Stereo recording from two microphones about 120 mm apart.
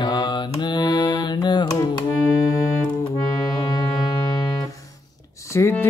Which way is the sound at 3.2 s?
30° left (ahead or behind).